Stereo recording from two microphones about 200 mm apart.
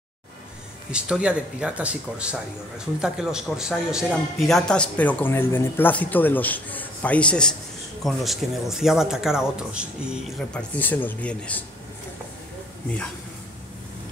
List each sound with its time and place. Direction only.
0.9 s a man's voice: 5° right (ahead or behind)
10.7 s a man's voice: 10° left (ahead or behind)